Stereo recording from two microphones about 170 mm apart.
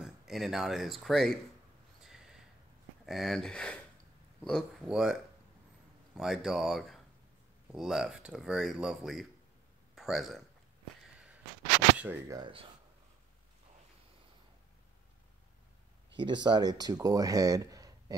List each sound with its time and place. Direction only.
0.0 s speech: centre (ahead or behind)
2.0 s a sound: 5° right (ahead or behind)
3.1 s speech: centre (ahead or behind)
6.1 s speech: centre (ahead or behind)
12.0 s speech: 10° right (ahead or behind)
12.4 s speech: 30° right (ahead or behind)
16.2 s speech: 25° right (ahead or behind)